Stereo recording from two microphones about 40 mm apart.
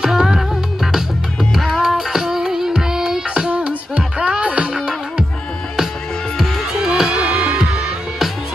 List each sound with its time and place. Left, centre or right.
0.0 s music: centre
1.5 s music: centre
3.3 s music: right
6.8 s music: centre
7.3 s music: centre